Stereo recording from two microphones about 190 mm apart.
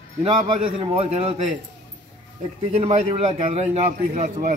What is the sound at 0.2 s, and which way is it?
Speech, 30° right (ahead or behind).